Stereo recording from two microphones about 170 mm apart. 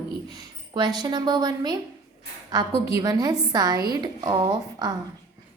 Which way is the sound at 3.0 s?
25° right (ahead or behind).